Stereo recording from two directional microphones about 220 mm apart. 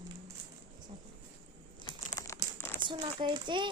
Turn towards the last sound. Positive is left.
turn(degrees=-20)  # may be behind; listen again after turning